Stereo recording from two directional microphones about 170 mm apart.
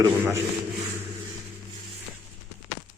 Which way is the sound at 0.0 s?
15° right (ahead or behind).